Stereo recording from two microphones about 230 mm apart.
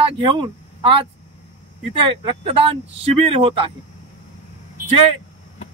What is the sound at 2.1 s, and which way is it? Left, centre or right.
A man's voice, right.